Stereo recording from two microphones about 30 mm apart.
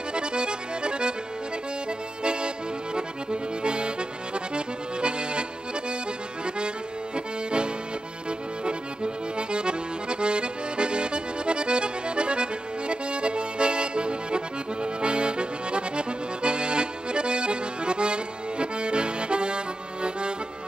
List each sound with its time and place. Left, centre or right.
0.1 s accordion: right
7.2 s accordion: right